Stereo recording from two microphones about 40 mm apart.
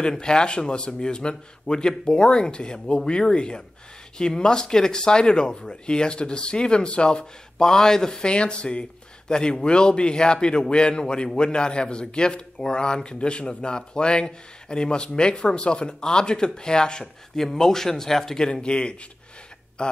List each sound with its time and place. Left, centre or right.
0.2 s a man's voice: left